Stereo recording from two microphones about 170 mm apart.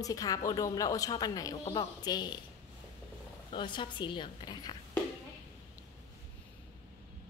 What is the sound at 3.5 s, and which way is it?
Speech, 30° left (ahead or behind).